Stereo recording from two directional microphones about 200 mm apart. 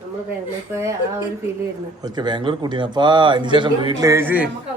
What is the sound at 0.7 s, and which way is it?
A man's voice, 15° right (ahead or behind).